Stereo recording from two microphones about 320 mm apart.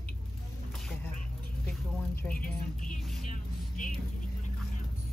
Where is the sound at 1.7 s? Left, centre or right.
Centre.